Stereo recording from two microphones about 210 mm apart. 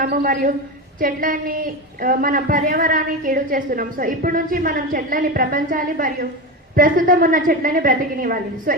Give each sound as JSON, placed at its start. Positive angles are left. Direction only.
{"t": 0.0, "sound": "a woman's voice", "side_deg": -40}